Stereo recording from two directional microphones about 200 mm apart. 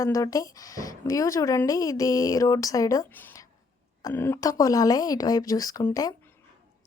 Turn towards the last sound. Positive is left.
turn(degrees=15)  # may be behind; listen again after turning